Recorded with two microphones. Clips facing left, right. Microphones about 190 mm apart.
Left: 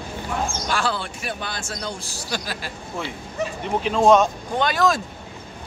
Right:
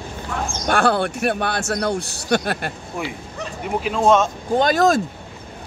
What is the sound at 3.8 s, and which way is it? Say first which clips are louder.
Speech: left 1 dB; 5° right (ahead or behind).